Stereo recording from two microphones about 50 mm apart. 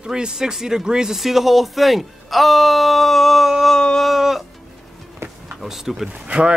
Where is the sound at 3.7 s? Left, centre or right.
Centre.